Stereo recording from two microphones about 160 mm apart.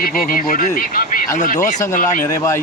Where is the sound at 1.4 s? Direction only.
50° left (ahead or behind).